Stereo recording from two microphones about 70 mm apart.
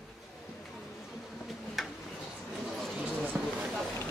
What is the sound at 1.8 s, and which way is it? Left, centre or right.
Tick-tock, centre.